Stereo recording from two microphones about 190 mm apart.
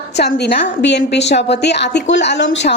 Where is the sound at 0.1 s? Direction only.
60° left (ahead or behind).